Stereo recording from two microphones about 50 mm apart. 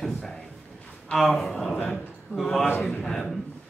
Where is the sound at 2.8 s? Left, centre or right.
Centre.